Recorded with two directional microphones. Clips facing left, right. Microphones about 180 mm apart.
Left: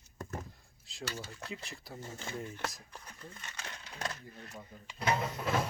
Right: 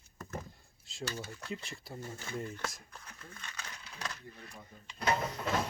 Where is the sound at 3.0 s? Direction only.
15° left (ahead or behind).